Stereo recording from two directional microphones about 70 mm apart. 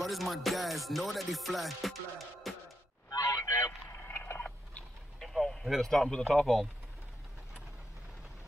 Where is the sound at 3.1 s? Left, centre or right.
Left.